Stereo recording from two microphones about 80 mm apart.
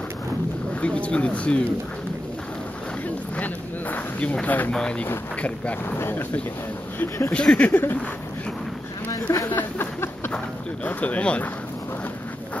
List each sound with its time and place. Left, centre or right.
0.7 s speech: centre
3.3 s a sound: centre
4.7 s speech: centre
5.9 s speech: left
7.3 s speech: centre
9.1 s speech: left
9.6 s a sound: left
10.3 s speech: centre